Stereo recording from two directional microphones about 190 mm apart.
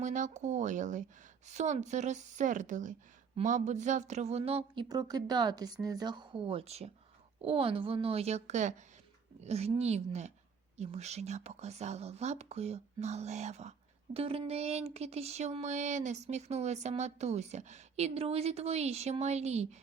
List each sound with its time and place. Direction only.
0.0 s speech: 40° right (ahead or behind)